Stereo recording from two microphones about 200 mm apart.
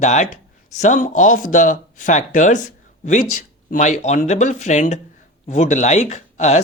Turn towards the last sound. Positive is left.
turn(degrees=35)  # may be behind; listen again after turning